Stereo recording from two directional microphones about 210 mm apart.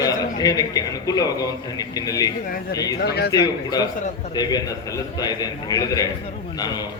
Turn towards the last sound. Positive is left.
turn(degrees=20)  # may be behind; listen again after turning